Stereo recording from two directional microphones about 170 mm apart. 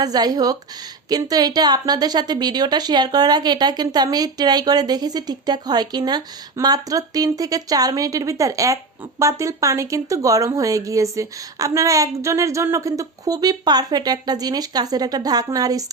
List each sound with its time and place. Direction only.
0.0 s a woman's voice: 25° right (ahead or behind)